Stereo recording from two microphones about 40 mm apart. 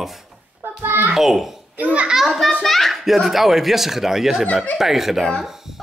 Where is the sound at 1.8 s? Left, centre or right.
Right.